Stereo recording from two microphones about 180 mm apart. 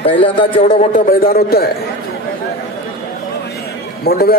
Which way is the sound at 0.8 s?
50° left (ahead or behind).